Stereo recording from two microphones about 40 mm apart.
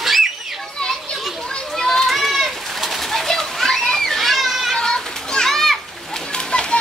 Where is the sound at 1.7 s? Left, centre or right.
Centre.